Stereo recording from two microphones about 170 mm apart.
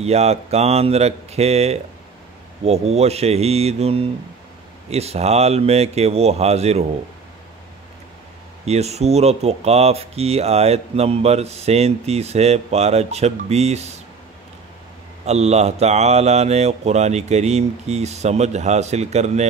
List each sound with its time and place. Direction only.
0.0 s speech: 40° right (ahead or behind)
8.6 s speech: 40° right (ahead or behind)
15.2 s speech: 40° right (ahead or behind)